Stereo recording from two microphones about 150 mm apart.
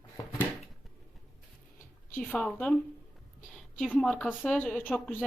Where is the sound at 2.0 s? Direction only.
10° left (ahead or behind).